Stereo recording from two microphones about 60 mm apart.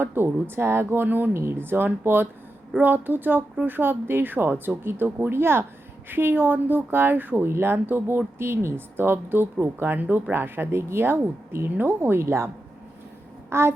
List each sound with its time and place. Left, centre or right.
0.0 s speech: right
1.3 s speech: right
12.2 s a woman's voice: right
13.5 s a sound: right